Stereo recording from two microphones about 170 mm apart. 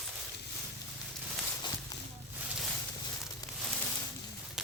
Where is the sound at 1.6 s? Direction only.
25° left (ahead or behind).